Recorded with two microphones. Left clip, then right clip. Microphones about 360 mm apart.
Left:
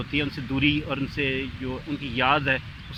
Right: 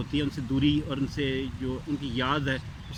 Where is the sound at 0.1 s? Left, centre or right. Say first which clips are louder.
Left 2 dB; centre.